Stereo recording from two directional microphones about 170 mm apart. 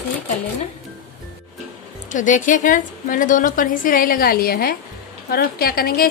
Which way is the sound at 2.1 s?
50° left (ahead or behind).